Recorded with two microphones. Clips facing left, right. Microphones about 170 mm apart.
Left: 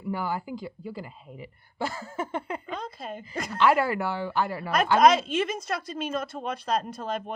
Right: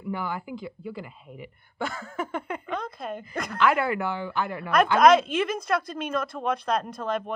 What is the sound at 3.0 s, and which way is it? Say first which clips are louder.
Speech: right 2 dB; 60° right (ahead or behind).